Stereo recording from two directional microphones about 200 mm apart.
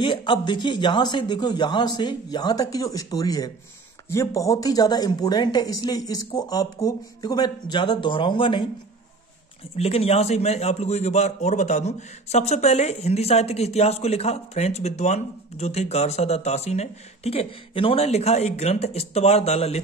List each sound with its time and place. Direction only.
0.0 s speech: 25° left (ahead or behind)
9.8 s a man's voice: 30° left (ahead or behind)